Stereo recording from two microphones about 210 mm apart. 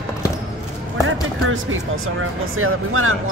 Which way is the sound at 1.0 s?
75° right (ahead or behind).